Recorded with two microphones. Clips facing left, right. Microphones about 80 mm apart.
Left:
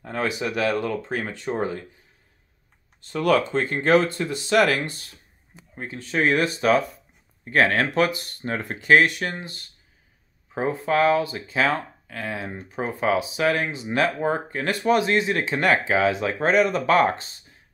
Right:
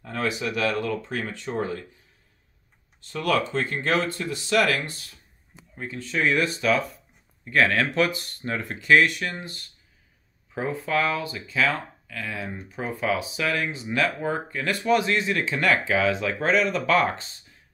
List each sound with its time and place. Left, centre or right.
0.0 s speech: left
1.6 s speech: left
3.1 s speech: left
6.1 s speech: left
10.5 s speech: left
14.7 s speech: left
15.2 s speech: left